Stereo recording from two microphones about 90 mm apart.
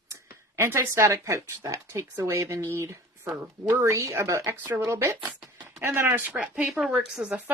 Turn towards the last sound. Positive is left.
turn(degrees=-5)  # may be behind; listen again after turning